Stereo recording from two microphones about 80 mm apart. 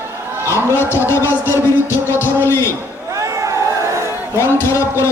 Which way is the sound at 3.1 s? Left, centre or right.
Right.